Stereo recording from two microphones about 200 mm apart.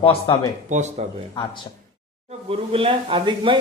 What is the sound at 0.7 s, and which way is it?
Speech, 35° right (ahead or behind).